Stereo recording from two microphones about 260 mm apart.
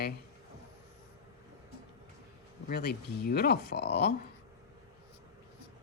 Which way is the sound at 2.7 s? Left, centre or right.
Left.